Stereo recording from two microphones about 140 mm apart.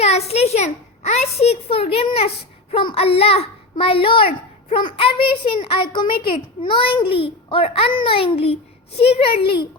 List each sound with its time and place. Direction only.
0.0 s a child's voice: 50° left (ahead or behind)